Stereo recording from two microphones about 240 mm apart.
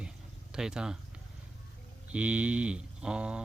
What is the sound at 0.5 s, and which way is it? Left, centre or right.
Speech, centre.